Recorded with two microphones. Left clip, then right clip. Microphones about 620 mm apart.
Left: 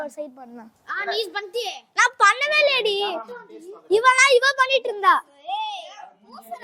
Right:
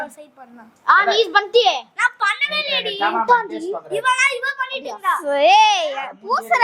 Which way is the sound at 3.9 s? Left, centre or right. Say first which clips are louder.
Left 3 dB; left.